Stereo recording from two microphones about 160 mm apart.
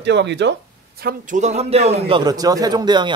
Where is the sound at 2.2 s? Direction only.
25° right (ahead or behind).